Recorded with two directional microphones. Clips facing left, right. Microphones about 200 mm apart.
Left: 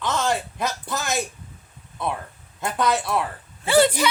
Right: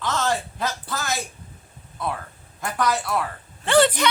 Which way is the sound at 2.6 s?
25° left (ahead or behind).